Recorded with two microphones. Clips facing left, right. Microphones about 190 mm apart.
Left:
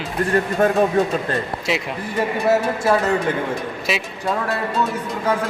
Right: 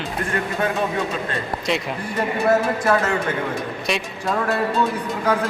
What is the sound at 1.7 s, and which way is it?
Speech, 5° left (ahead or behind).